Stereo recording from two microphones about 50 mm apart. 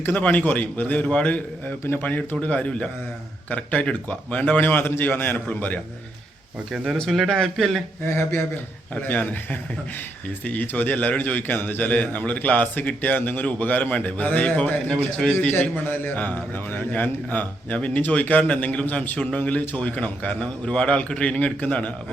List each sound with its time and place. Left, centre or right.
0.0 s a man's voice: left
6.7 s speech: centre
6.9 s speech: centre
8.0 s speech: left
9.0 s a man's voice: left
11.9 s a man's voice: left